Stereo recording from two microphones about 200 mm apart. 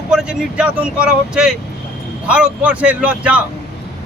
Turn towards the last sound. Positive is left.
turn(degrees=-5)  # may be behind; listen again after turning